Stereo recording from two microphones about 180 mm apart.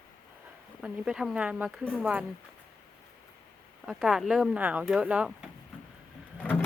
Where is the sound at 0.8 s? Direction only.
5° right (ahead or behind).